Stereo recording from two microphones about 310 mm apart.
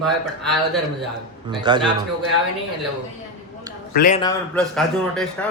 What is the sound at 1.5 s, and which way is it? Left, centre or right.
Speech, centre.